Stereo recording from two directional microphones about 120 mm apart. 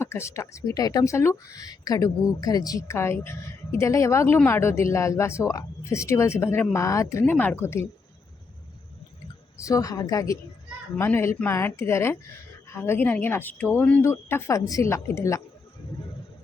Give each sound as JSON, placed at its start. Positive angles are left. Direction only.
{"t": 0.0, "sound": "a woman's voice", "side_deg": 20}
{"t": 9.6, "sound": "a woman's voice", "side_deg": 30}